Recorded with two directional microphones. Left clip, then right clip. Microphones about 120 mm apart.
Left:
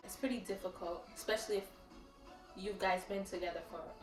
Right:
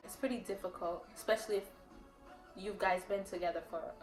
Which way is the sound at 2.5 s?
35° right (ahead or behind).